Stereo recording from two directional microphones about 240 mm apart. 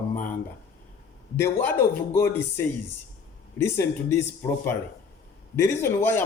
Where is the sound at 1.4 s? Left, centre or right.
Centre.